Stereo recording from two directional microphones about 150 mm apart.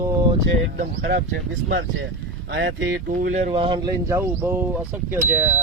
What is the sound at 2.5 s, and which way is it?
Speech, 90° right.